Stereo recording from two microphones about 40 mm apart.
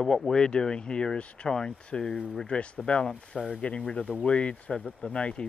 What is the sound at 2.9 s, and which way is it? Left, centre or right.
Speech, left.